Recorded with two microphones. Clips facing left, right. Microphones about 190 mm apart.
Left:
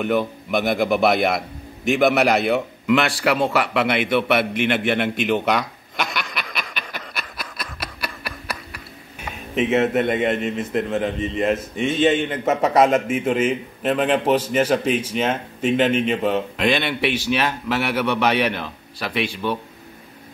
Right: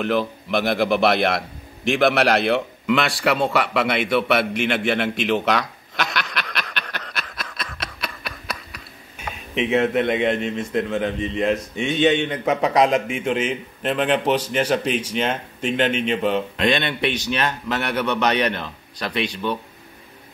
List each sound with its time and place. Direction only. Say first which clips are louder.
0.5 s a man's voice: even; centre (ahead or behind)
1.9 s a sound: left 1 dB; centre (ahead or behind)
9.6 s a man's voice: left 1 dB; centre (ahead or behind)